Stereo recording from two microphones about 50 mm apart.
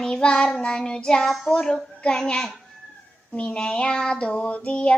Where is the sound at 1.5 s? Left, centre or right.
Centre.